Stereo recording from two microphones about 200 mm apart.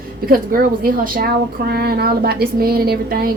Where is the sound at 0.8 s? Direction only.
45° right (ahead or behind).